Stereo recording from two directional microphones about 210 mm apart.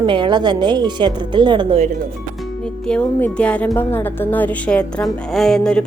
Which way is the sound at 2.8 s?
5° left (ahead or behind).